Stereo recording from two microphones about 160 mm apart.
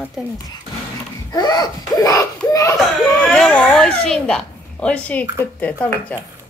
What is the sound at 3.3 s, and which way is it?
A woman's voice, 5° left (ahead or behind).